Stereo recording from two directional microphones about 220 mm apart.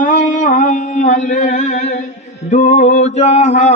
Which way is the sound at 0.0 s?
35° left (ahead or behind).